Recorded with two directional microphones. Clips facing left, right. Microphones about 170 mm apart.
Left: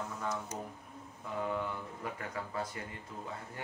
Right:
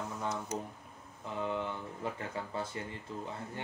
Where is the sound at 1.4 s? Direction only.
25° right (ahead or behind).